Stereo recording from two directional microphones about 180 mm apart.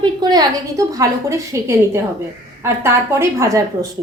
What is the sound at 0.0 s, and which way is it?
A woman's voice, 20° right (ahead or behind).